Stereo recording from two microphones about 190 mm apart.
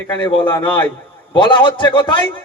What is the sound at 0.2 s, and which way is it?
A man's voice, 25° left (ahead or behind).